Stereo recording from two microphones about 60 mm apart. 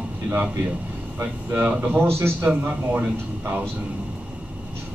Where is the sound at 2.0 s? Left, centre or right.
Right.